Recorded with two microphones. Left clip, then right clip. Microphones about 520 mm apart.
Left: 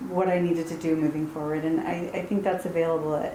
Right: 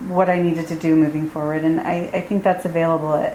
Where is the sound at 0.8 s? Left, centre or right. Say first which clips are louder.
Right 10 dB; right.